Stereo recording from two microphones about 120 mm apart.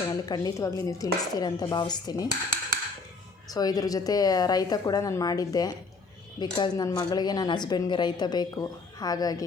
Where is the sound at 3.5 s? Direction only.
30° left (ahead or behind).